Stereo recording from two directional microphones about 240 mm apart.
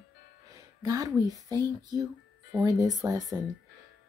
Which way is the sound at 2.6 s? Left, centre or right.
Centre.